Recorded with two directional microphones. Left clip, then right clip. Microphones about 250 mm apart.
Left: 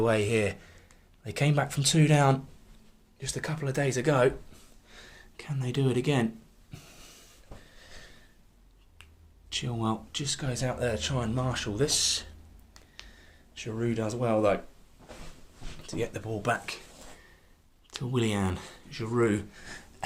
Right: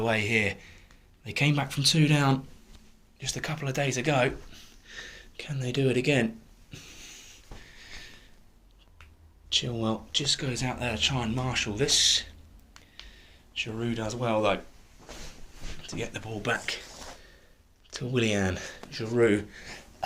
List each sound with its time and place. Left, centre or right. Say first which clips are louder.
0.0 s speech: even; left
6.7 s a sound: right 6 dB; left
9.5 s speech: right 4 dB; left
15.8 s speech: left 2 dB; left
18.1 s speech: right 3 dB; left